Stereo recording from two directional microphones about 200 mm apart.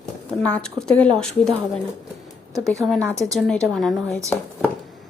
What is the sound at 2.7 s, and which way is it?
Speech, centre (ahead or behind).